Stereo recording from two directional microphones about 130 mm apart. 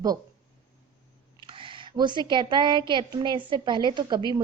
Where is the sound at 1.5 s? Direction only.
40° right (ahead or behind).